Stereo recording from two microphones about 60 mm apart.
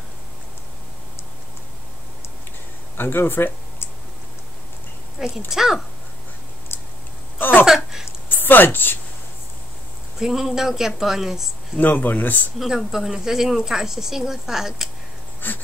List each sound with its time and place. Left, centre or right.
3.0 s speech: left
5.5 s a woman's voice: centre
6.7 s tick-tock: left
7.3 s a sound: left
7.6 s a sound: centre
8.3 s a woman's voice: left
10.1 s a woman's voice: centre
11.7 s speech: left
12.5 s a woman's voice: centre
15.4 s speech: left